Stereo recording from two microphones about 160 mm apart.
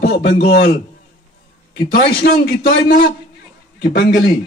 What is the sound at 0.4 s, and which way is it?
Speech, 75° left (ahead or behind).